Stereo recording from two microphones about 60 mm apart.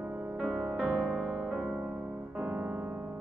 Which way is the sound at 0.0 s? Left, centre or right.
Right.